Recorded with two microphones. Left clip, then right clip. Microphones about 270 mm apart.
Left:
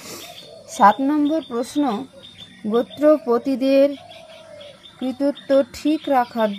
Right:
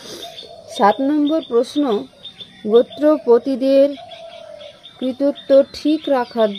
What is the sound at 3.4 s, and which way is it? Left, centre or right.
Speech, left.